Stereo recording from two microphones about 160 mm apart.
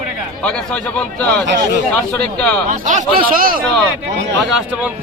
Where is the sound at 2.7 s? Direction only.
50° right (ahead or behind).